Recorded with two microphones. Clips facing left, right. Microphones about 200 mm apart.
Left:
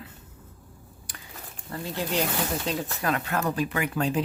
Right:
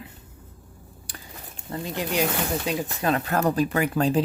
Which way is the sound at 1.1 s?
30° right (ahead or behind).